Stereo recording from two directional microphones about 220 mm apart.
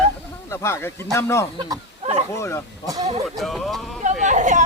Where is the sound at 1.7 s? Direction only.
25° right (ahead or behind).